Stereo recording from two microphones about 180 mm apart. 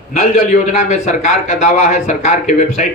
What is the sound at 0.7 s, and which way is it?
Speech, 40° left (ahead or behind).